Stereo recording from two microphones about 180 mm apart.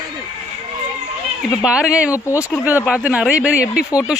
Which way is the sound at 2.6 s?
5° right (ahead or behind).